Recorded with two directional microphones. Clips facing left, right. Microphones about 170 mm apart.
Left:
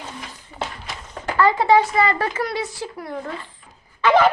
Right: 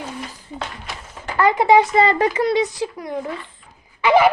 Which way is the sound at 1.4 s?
15° right (ahead or behind).